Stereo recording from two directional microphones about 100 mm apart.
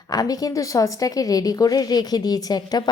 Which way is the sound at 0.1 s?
40° left (ahead or behind).